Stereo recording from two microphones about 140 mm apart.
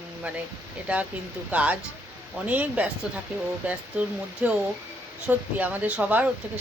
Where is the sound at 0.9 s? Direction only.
10° right (ahead or behind).